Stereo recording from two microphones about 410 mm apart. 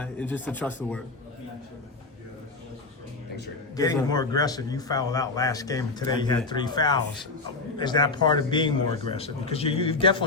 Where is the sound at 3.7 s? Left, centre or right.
Centre.